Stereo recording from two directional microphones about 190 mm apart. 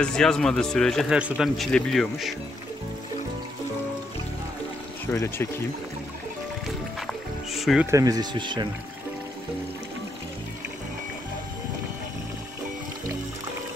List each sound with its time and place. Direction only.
0.0 s a man's voice: 5° left (ahead or behind)
5.1 s speech: 15° left (ahead or behind)
7.0 s music: centre (ahead or behind)
7.9 s speech: 20° right (ahead or behind)